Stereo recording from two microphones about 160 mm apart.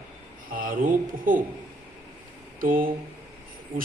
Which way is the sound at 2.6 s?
60° right (ahead or behind).